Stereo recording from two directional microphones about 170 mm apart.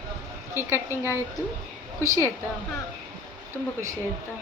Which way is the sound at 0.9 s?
15° left (ahead or behind).